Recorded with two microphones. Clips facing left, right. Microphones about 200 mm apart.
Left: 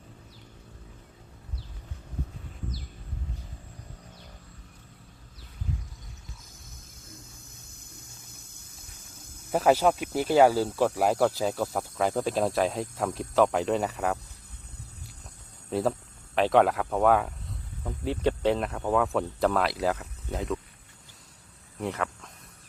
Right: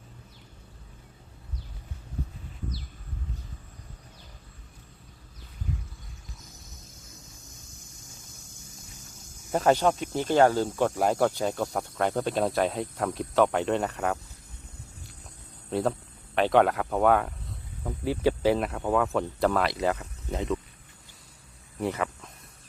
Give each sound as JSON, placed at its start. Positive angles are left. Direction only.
{"t": 7.7, "sound": "cricket", "side_deg": 60}
{"t": 9.5, "sound": "speech", "side_deg": 5}
{"t": 15.7, "sound": "speech", "side_deg": 0}
{"t": 21.8, "sound": "speech", "side_deg": 0}